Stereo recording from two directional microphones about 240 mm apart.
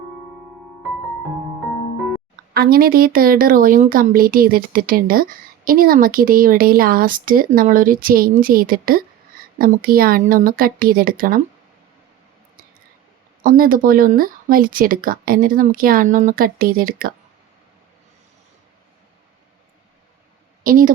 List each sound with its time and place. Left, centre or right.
2.5 s speech: right
13.4 s speech: right
20.7 s speech: right